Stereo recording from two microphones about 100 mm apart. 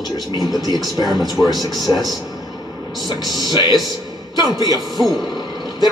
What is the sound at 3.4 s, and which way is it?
A man's voice, 45° left (ahead or behind).